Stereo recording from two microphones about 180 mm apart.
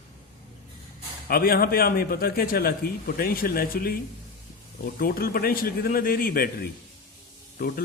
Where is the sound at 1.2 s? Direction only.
55° left (ahead or behind).